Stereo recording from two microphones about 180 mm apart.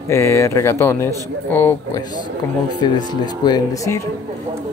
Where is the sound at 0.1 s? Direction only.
15° left (ahead or behind).